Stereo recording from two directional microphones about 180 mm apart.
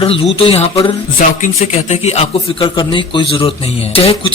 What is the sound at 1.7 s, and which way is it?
A man's voice, 35° left (ahead or behind).